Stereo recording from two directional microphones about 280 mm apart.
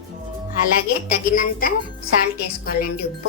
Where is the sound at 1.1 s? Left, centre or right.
Left.